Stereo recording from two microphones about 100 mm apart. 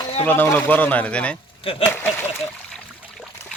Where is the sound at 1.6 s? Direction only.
65° left (ahead or behind).